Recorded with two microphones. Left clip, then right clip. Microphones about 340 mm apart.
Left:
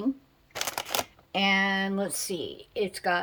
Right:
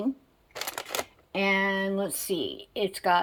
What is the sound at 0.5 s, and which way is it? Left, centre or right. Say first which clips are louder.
Shuffling cards: left 2 dB; left.